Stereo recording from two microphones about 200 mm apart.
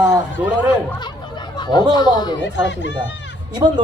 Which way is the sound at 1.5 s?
20° left (ahead or behind).